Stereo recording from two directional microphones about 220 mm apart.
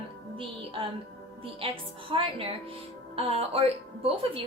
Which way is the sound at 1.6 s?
25° right (ahead or behind).